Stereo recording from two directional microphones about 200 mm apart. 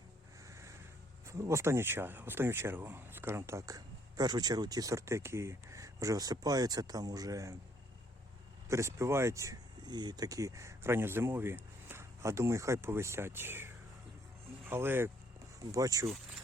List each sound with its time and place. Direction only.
0.4 s music: 15° right (ahead or behind)
1.3 s speech: 15° right (ahead or behind)
8.7 s speech: 15° right (ahead or behind)